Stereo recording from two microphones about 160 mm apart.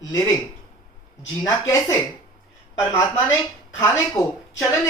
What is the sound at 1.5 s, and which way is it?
Speech, 20° left (ahead or behind).